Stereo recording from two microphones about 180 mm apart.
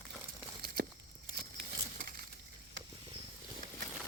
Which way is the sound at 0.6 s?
55° right (ahead or behind).